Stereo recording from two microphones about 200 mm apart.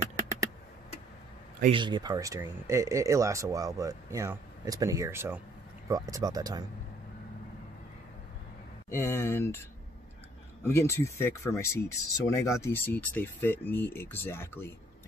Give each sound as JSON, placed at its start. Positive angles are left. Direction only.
{"t": 0.0, "sound": "computer keyboard", "side_deg": -15}
{"t": 1.7, "sound": "speech", "side_deg": -25}
{"t": 8.9, "sound": "speech", "side_deg": 15}
{"t": 10.6, "sound": "speech", "side_deg": 15}